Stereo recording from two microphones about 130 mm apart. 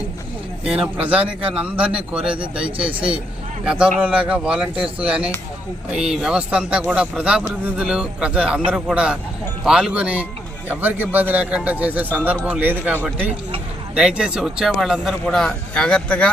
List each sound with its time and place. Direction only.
0.6 s a man's voice: 5° right (ahead or behind)
2.6 s speech: 45° right (ahead or behind)
2.9 s a man's voice: 10° right (ahead or behind); by 16.3 s 10° left (ahead or behind)